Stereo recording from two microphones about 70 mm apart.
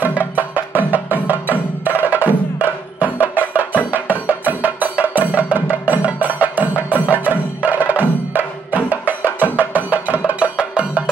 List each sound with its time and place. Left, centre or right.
0.0 s music: right